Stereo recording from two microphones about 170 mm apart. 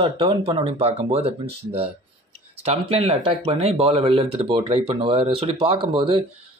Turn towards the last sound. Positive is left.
turn(degrees=-30)  # may be behind; listen again after turning